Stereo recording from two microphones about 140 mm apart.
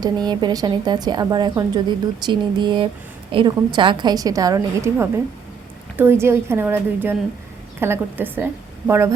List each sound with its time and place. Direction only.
0.0 s a woman's voice: 30° right (ahead or behind); by 8.4 s 15° right (ahead or behind)